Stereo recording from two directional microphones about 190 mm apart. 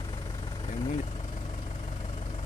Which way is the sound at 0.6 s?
30° left (ahead or behind).